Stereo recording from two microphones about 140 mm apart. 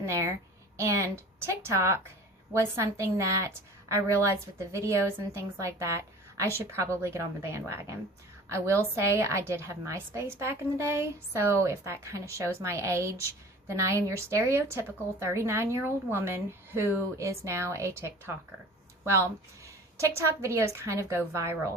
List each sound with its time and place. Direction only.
0.0 s a woman's voice: 20° right (ahead or behind)
19.1 s a woman's voice: 20° right (ahead or behind)